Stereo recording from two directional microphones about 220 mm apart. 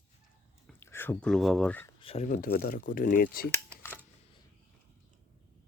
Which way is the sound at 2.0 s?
30° left (ahead or behind).